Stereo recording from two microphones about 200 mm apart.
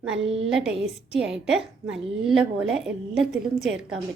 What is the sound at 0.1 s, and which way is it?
A woman's voice, 5° right (ahead or behind).